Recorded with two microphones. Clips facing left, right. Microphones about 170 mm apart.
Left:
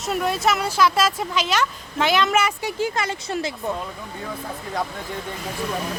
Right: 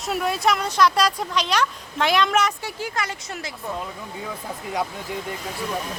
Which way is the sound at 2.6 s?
25° left (ahead or behind).